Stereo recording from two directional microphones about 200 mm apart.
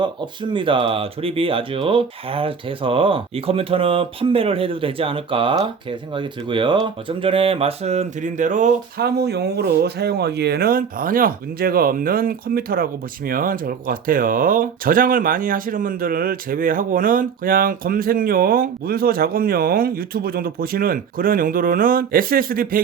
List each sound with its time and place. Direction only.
0.0 s speech: 25° right (ahead or behind); by 22.8 s 45° right (ahead or behind)